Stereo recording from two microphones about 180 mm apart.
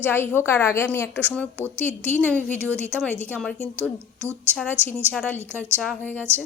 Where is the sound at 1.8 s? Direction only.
40° left (ahead or behind).